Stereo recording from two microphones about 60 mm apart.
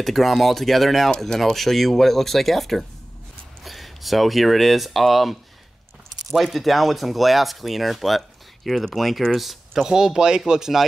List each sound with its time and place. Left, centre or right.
0.0 s speech: centre